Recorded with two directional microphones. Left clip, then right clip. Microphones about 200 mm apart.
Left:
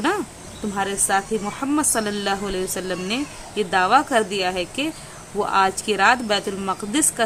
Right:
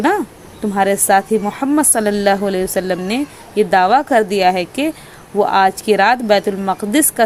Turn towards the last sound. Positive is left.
turn(degrees=-25)  # may be behind; listen again after turning